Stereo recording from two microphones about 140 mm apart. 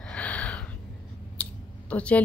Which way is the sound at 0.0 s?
10° left (ahead or behind).